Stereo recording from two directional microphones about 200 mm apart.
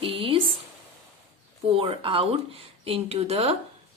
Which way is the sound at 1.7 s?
25° right (ahead or behind).